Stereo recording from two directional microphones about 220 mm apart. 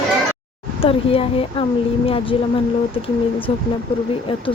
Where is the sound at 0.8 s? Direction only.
25° left (ahead or behind).